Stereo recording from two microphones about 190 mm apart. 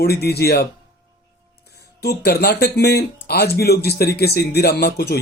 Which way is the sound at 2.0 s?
60° left (ahead or behind).